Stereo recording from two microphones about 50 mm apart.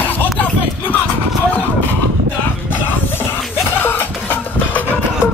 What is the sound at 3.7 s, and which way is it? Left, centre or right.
Music, left.